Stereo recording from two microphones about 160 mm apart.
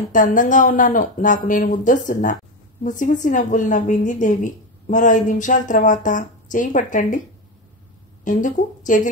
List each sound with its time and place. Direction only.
0.1 s a woman's voice: 55° left (ahead or behind)
8.2 s speech: 55° left (ahead or behind)